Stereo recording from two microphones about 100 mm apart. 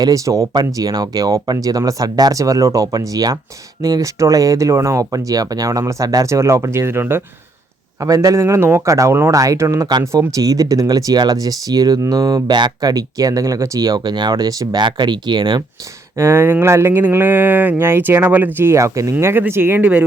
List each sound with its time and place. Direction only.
0.0 s speech: 35° right (ahead or behind)
8.0 s speech: 35° right (ahead or behind)
16.1 s speech: 25° right (ahead or behind)
19.1 s speech: 20° right (ahead or behind)
19.8 s speech: 10° right (ahead or behind)